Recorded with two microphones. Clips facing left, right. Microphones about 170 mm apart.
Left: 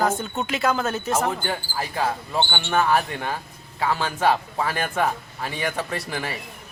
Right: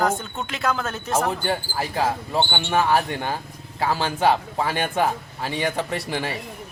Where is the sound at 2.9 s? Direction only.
30° right (ahead or behind).